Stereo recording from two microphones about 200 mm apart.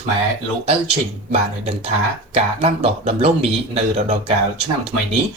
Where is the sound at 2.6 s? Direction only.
30° right (ahead or behind).